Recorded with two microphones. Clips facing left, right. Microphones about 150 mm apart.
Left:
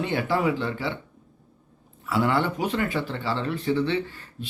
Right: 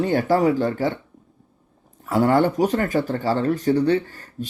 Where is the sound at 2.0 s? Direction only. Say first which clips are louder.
Right 6 dB; 45° right (ahead or behind).